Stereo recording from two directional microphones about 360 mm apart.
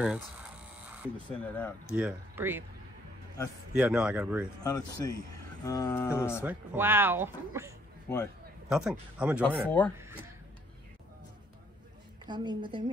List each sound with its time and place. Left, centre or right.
1.1 s speech: centre
3.7 s speech: centre
4.6 s a sound: centre
6.4 s speech: centre
12.3 s a woman's voice: centre